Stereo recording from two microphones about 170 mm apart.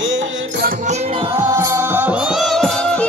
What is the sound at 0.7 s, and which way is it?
Music, 40° right (ahead or behind).